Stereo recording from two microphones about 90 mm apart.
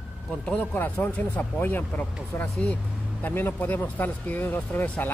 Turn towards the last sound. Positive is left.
turn(degrees=20)  # may be behind; listen again after turning